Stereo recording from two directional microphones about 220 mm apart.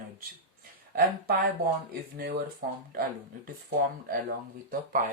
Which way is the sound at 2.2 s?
45° right (ahead or behind).